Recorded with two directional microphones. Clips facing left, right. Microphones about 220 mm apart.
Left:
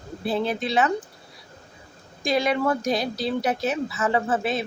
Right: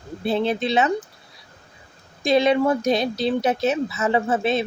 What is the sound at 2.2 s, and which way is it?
Speech, 25° right (ahead or behind).